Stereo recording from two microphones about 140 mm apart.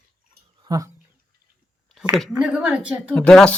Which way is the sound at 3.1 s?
5° left (ahead or behind).